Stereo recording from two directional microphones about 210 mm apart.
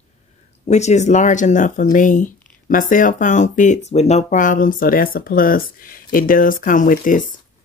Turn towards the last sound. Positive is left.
turn(degrees=40)  # may be behind; listen again after turning